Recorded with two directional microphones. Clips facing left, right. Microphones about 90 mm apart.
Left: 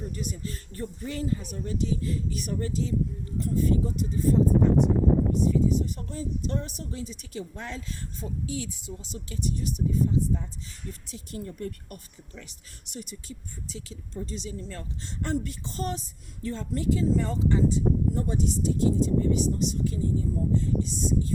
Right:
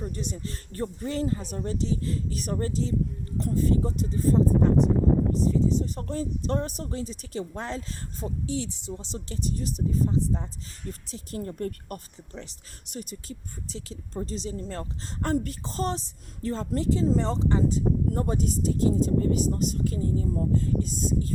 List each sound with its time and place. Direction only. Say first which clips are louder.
0.0 s speech: right 1 dB; 40° right (ahead or behind)
5.5 s speech: even; 35° right (ahead or behind)